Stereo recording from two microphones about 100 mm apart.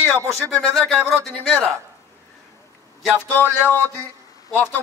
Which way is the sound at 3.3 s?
20° left (ahead or behind).